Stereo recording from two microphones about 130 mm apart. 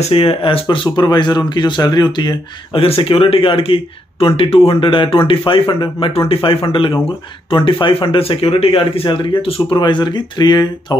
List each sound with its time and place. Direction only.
0.0 s speech: 45° left (ahead or behind)